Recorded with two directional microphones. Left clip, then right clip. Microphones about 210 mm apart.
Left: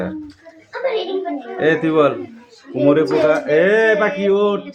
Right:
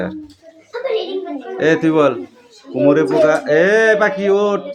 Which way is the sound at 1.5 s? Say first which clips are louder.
Right 1 dB; 10° right (ahead or behind).